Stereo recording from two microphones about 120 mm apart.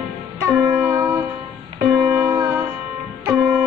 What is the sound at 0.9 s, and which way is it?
Music, 15° right (ahead or behind).